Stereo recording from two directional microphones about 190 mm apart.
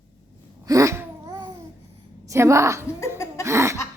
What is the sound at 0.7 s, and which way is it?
Babbling, 15° right (ahead or behind).